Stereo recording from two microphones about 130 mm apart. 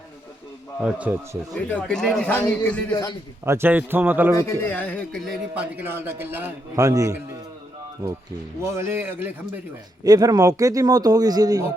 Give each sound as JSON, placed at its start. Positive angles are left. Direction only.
{"t": 0.8, "sound": "a man's voice", "side_deg": -10}
{"t": 1.5, "sound": "speech", "side_deg": 10}
{"t": 2.9, "sound": "a man's voice", "side_deg": 30}
{"t": 3.4, "sound": "a man's voice", "side_deg": -20}
{"t": 4.4, "sound": "speech", "side_deg": 15}
{"t": 5.5, "sound": "a man's voice", "side_deg": -15}
{"t": 8.6, "sound": "a man's voice", "side_deg": -20}
{"t": 10.0, "sound": "speech", "side_deg": -30}